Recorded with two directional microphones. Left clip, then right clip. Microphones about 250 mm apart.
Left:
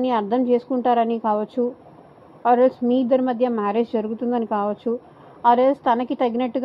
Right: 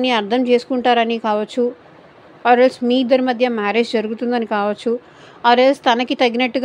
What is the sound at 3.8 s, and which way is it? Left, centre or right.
Speech, right.